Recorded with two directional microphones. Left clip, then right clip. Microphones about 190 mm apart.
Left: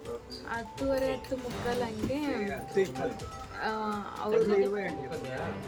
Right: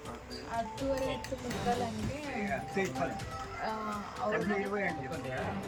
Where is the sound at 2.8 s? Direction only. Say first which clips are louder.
Left 7 dB; 20° left (ahead or behind).